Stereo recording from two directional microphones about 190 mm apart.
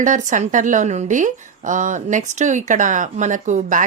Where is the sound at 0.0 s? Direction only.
40° right (ahead or behind).